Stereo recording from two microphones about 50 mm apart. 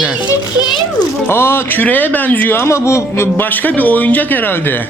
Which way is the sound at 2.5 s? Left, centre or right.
Left.